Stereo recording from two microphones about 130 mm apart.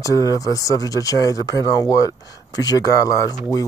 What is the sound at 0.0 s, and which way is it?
Speech, 25° left (ahead or behind).